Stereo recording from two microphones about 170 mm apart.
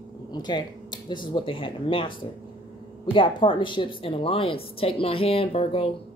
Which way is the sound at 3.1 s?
30° left (ahead or behind).